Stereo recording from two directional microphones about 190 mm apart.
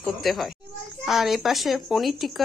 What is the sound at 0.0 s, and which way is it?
Speech, centre (ahead or behind).